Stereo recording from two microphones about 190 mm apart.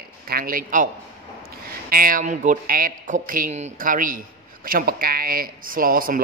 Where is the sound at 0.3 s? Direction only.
50° right (ahead or behind).